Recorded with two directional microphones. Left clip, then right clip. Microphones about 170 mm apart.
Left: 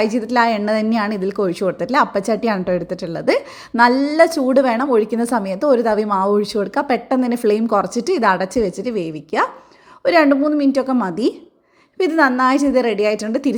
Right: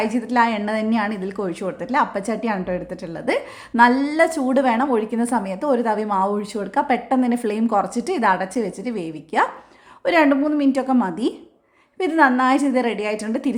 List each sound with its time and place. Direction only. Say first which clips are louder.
0.0 s a woman's voice: left 3 dB; 20° left (ahead or behind)